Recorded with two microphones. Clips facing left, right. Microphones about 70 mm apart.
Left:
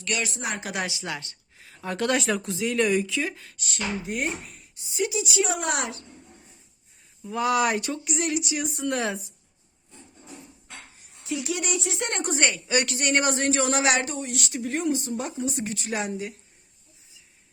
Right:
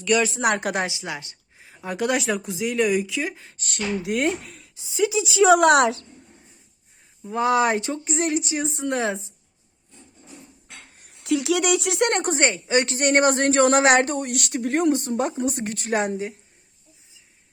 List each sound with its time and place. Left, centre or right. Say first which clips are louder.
0.4 s speech: right 10 dB; right
0.9 s speech: right 1 dB; centre
3.6 s speech: right 2 dB; right
4.0 s speech: right 6 dB; right
7.3 s speech: right 3 dB; right
10.9 s speech: right 8 dB; right
12.3 s a woman's voice: right 4 dB; right
13.0 s speech: right 5 dB; right